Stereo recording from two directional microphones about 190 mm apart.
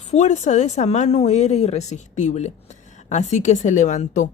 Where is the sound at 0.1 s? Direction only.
40° left (ahead or behind).